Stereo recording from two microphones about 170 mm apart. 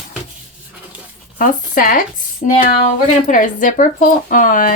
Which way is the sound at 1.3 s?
55° left (ahead or behind).